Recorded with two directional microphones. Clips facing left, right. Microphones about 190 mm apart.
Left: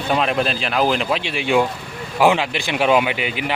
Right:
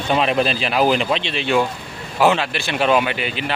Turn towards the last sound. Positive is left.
turn(degrees=15)  # may be behind; listen again after turning